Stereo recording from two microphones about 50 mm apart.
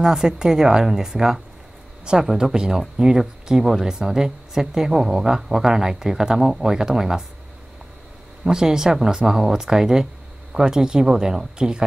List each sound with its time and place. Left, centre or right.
0.0 s speech: centre
8.5 s speech: centre